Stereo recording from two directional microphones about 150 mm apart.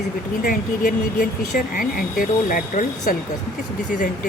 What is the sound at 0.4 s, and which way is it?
Speech, 65° left (ahead or behind).